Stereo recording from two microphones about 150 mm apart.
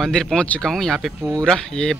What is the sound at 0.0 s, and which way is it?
Speech, centre (ahead or behind).